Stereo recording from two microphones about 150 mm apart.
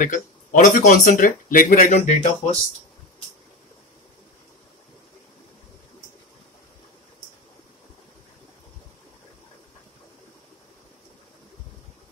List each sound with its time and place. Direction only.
0.0 s speech: 60° left (ahead or behind)